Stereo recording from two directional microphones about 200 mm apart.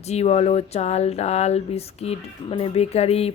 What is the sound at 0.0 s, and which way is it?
Speech, 30° left (ahead or behind).